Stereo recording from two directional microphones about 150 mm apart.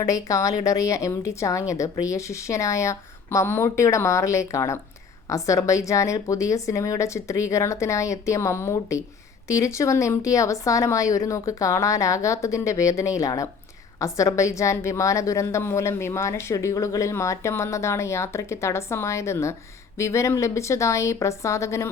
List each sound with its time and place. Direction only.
0.0 s a woman's voice: 25° left (ahead or behind)